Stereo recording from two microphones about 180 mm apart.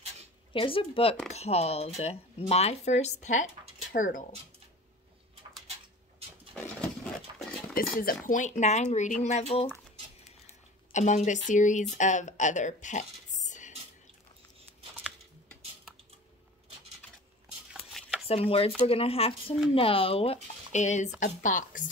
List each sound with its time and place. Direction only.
0.5 s speech: 30° left (ahead or behind); by 4.3 s 50° left (ahead or behind)
7.3 s a sound: 25° right (ahead or behind)
7.7 s speech: 55° left (ahead or behind); by 9.7 s 35° left (ahead or behind)
10.9 s speech: 40° left (ahead or behind)
18.2 s speech: 30° left (ahead or behind)